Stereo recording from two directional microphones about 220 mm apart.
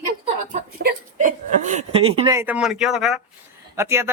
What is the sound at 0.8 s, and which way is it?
Speech, 35° right (ahead or behind).